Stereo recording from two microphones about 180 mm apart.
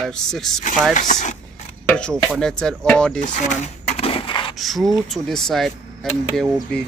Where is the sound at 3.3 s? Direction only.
40° left (ahead or behind).